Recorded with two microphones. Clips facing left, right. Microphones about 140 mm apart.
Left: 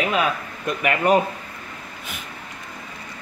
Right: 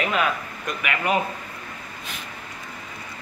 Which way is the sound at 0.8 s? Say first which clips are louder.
Left 6 dB; 40° left (ahead or behind).